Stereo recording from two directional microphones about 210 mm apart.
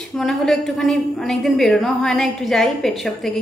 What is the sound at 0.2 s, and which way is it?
A woman's voice, centre (ahead or behind).